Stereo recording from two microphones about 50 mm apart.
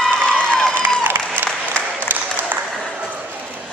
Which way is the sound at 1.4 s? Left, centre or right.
Left.